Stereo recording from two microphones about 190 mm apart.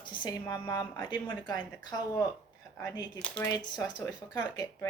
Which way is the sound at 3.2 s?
5° left (ahead or behind).